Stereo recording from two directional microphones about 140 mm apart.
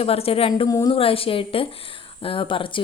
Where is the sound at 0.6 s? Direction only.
25° left (ahead or behind).